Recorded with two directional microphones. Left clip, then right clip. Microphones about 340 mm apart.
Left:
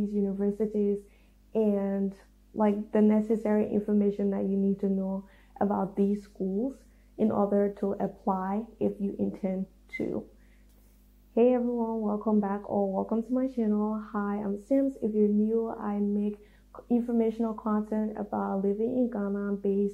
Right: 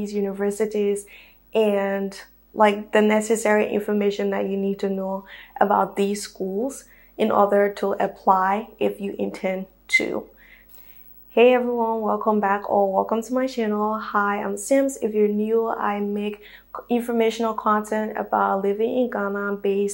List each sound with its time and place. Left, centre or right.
0.2 s speech: centre
4.5 s speech: right
4.7 s speech: centre
6.3 s speech: right; by 10.2 s centre
11.3 s speech: centre